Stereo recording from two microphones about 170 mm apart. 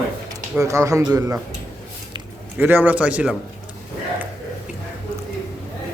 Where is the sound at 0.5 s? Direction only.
20° right (ahead or behind).